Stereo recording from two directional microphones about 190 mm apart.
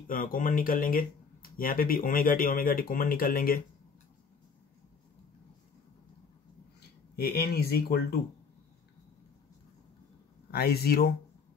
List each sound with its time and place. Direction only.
0.0 s speech: 45° left (ahead or behind)
7.2 s speech: 55° left (ahead or behind)
10.5 s speech: 55° left (ahead or behind)